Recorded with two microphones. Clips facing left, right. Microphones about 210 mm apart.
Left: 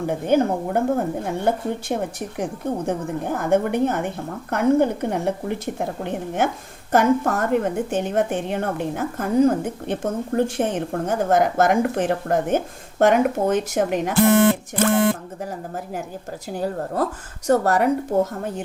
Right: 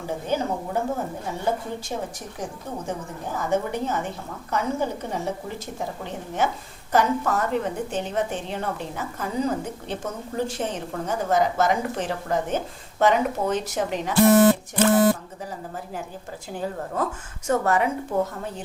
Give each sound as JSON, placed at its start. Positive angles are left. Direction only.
{"t": 0.0, "sound": "a woman's voice", "side_deg": 60}
{"t": 16.6, "sound": "a woman's voice", "side_deg": 35}